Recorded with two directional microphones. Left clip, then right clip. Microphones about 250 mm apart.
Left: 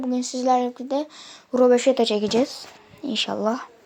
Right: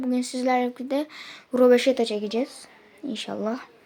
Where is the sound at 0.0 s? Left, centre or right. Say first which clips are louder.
Left 2 dB; centre.